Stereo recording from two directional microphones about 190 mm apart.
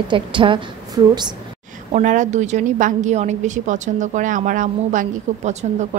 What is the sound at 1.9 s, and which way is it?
A woman's voice, 40° right (ahead or behind).